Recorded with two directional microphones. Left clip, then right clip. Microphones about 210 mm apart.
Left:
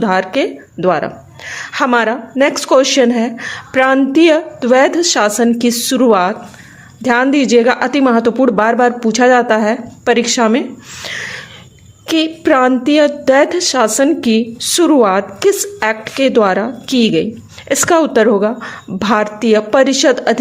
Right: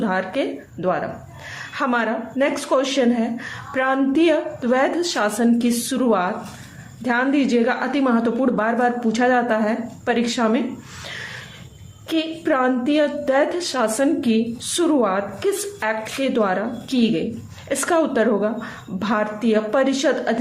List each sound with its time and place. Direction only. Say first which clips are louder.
0.0 s a woman's voice: left 8 dB; 45° left (ahead or behind)
12.0 s a woman's voice: left 9 dB; 50° left (ahead or behind)